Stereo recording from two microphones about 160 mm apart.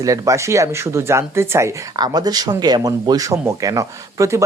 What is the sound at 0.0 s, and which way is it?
Speech, 20° right (ahead or behind).